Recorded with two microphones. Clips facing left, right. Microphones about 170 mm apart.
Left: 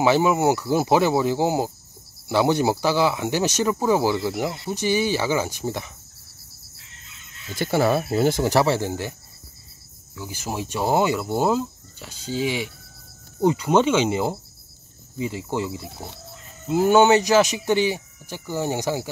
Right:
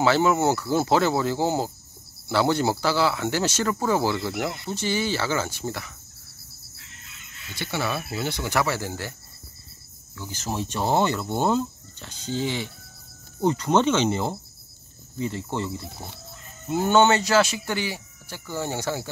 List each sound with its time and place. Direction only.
0.0 s speech: 15° left (ahead or behind)
7.5 s speech: 45° left (ahead or behind); by 9.1 s 20° left (ahead or behind)
10.1 s speech: 10° left (ahead or behind)